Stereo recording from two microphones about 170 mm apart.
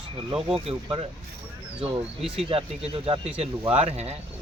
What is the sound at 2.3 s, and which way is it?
Speech, 35° right (ahead or behind).